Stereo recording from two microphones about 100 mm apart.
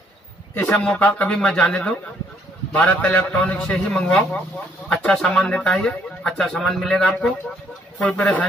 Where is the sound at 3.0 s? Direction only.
15° left (ahead or behind).